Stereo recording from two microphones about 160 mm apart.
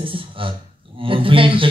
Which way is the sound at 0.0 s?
35° right (ahead or behind).